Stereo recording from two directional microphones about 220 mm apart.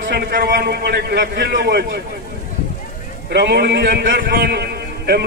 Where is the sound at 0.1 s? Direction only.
45° right (ahead or behind).